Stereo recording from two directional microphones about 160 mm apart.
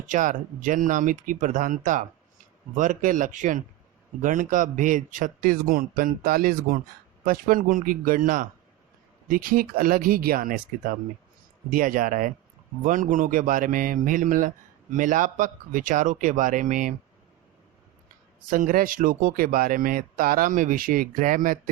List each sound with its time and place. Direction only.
0.1 s speech: 55° right (ahead or behind)
11.7 s speech: 60° right (ahead or behind)
18.5 s speech: 60° right (ahead or behind)